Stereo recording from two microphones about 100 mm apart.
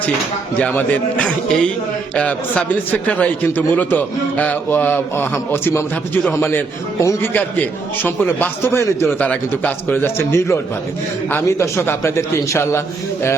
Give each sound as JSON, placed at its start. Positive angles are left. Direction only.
{"t": 0.7, "sound": "a man's voice", "side_deg": 15}
{"t": 7.3, "sound": "a man's voice", "side_deg": 20}
{"t": 9.1, "sound": "a man's voice", "side_deg": 15}